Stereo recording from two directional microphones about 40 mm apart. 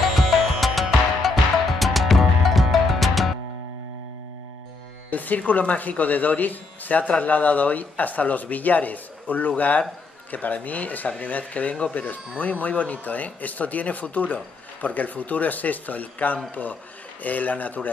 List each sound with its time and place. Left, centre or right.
0.0 s music: centre
5.1 s speech: left